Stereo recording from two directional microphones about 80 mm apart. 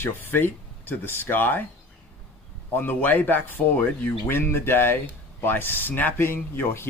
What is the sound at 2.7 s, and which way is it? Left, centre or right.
Speech, left.